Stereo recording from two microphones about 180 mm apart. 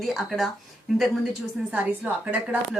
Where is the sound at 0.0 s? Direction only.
Centre (ahead or behind).